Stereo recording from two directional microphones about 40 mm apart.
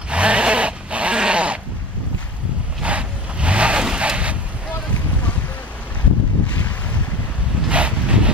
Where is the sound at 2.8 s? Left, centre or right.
Right.